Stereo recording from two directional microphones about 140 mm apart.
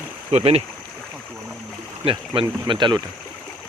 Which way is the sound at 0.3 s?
45° right (ahead or behind).